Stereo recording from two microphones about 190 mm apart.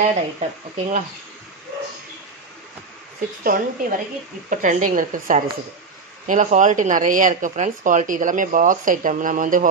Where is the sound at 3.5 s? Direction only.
45° right (ahead or behind).